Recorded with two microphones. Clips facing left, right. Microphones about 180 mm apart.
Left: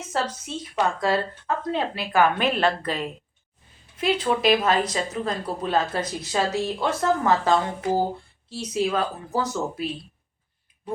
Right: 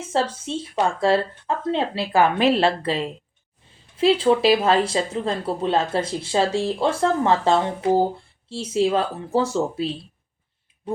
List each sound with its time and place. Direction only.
0.0 s speech: 30° right (ahead or behind)